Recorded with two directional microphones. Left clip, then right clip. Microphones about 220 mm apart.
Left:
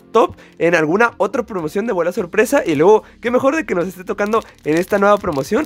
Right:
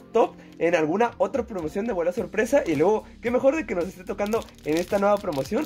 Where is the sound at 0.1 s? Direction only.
40° left (ahead or behind).